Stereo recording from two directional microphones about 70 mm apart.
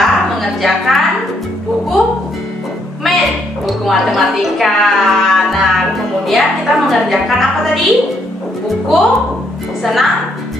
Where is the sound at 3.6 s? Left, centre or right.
Centre.